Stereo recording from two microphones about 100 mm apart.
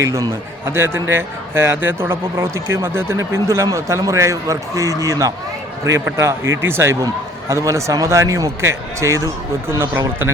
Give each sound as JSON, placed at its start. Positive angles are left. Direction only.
{"t": 0.0, "sound": "a man's voice", "side_deg": -30}